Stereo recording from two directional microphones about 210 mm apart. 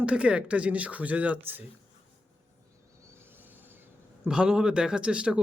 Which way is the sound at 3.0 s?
10° right (ahead or behind).